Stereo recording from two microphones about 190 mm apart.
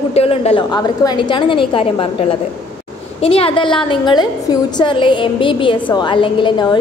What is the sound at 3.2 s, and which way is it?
A woman's voice, 30° left (ahead or behind).